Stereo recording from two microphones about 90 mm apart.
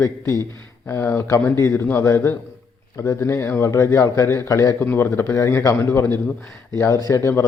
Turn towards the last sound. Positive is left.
turn(degrees=35)  # may be behind; listen again after turning